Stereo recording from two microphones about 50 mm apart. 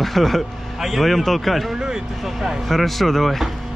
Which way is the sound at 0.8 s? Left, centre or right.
Centre.